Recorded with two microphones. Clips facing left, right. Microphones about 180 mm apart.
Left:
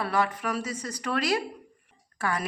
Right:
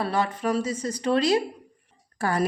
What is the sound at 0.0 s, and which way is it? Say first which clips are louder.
A woman's voice: right 2 dB; 25° right (ahead or behind).